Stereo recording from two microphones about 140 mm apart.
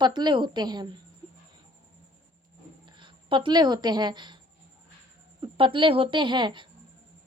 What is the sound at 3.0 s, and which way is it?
Speech, 35° right (ahead or behind).